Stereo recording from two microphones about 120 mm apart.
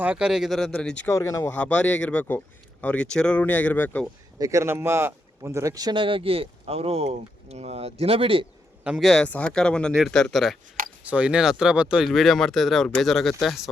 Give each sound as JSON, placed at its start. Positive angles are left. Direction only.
{"t": 0.0, "sound": "speech", "side_deg": -10}
{"t": 1.0, "sound": "speech", "side_deg": 25}
{"t": 1.5, "sound": "speech", "side_deg": 10}
{"t": 4.4, "sound": "speech", "side_deg": -25}
{"t": 5.9, "sound": "speech", "side_deg": -45}
{"t": 8.8, "sound": "speech", "side_deg": -10}
{"t": 9.0, "sound": "speech", "side_deg": 10}
{"t": 11.0, "sound": "speech", "side_deg": -10}